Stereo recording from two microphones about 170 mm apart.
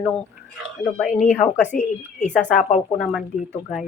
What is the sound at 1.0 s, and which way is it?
Speech, 45° left (ahead or behind).